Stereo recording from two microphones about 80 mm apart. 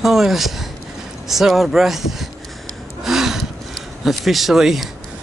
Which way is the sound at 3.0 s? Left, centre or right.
Centre.